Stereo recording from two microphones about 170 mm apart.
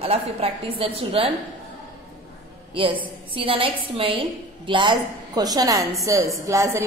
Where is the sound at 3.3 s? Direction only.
30° right (ahead or behind).